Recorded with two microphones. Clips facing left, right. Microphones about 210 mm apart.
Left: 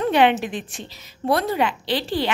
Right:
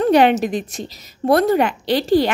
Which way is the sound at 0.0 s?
40° right (ahead or behind).